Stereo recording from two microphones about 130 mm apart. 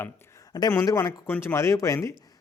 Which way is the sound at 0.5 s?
30° left (ahead or behind).